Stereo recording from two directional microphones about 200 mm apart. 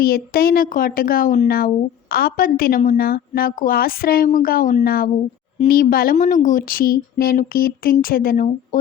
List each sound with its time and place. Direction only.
0.0 s a woman's voice: 50° left (ahead or behind)